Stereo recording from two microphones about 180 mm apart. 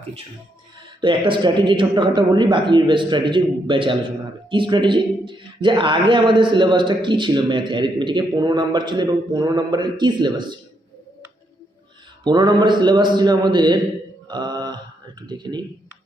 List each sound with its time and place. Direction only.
1.0 s a man's voice: 25° right (ahead or behind)
12.2 s a man's voice: 25° right (ahead or behind)
14.3 s mantra: 25° right (ahead or behind)
15.3 s a man's voice: 25° right (ahead or behind)